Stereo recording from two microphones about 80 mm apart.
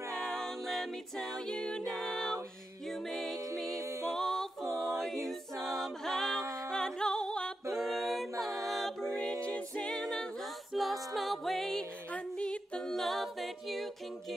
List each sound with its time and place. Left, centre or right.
0.1 s a capella: centre
2.0 s music: centre
3.8 s music: right
4.1 s a capella: centre
6.7 s music: centre
7.7 s a capella: centre
12.1 s a capella: centre